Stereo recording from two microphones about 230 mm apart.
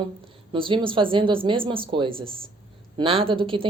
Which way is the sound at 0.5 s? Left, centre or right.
Right.